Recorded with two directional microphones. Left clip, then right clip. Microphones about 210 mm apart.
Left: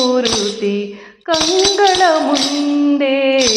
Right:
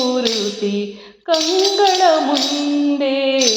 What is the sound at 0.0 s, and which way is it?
Tambourine, 30° left (ahead or behind).